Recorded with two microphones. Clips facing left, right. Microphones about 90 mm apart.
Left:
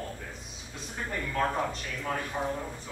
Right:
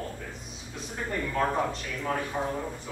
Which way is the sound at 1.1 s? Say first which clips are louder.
Right 2 dB; 5° right (ahead or behind).